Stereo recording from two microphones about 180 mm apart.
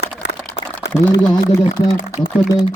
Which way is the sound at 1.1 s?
20° left (ahead or behind).